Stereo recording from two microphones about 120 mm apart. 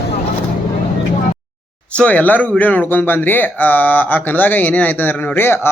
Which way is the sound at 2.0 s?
15° left (ahead or behind).